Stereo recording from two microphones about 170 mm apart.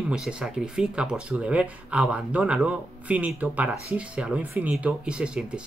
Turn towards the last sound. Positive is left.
turn(degrees=-5)  # may be behind; listen again after turning